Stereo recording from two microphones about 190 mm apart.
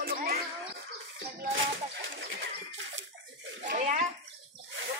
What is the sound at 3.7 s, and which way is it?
Bathtub, 45° right (ahead or behind).